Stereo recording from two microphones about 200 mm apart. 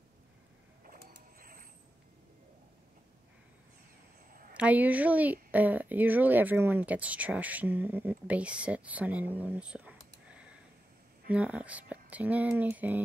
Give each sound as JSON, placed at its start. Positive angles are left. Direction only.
{"t": 0.8, "sound": "mechanisms", "side_deg": -45}
{"t": 4.6, "sound": "speech", "side_deg": -10}